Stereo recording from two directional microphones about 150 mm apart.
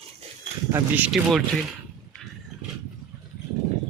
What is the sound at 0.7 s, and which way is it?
Speech, 10° right (ahead or behind).